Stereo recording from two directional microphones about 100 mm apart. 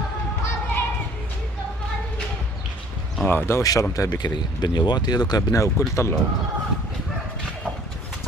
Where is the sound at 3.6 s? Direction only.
35° left (ahead or behind).